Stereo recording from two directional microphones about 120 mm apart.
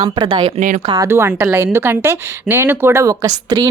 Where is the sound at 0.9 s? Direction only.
20° right (ahead or behind).